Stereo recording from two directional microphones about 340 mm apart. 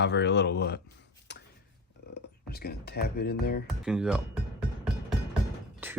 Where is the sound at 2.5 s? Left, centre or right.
Left.